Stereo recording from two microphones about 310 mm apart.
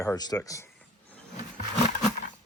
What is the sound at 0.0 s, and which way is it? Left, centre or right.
Speech, centre.